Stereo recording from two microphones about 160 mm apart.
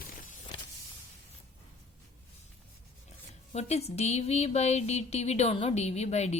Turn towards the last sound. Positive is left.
turn(degrees=45)  # may be behind; listen again after turning